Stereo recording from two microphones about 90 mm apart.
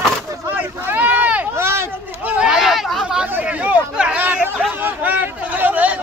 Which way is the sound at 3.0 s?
10° right (ahead or behind).